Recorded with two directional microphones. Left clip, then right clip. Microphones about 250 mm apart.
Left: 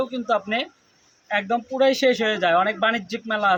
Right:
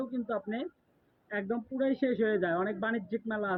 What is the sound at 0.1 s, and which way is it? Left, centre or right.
Speech, left.